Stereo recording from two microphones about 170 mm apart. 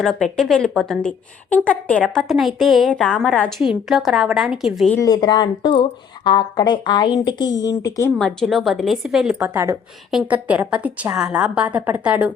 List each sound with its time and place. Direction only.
0.0 s a woman's voice: centre (ahead or behind)
4.9 s speech: 25° left (ahead or behind)
8.4 s a woman's voice: centre (ahead or behind)
9.4 s a woman's voice: 15° right (ahead or behind)
10.1 s a woman's voice: 5° right (ahead or behind)